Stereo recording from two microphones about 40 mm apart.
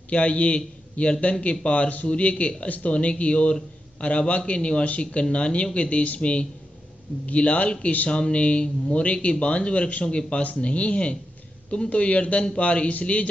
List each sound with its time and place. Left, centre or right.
0.1 s a man's voice: left